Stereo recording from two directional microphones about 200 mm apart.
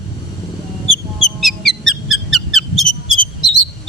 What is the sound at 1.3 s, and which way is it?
Music, centre (ahead or behind).